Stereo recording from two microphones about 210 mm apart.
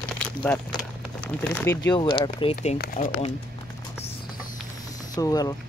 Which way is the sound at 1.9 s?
25° left (ahead or behind).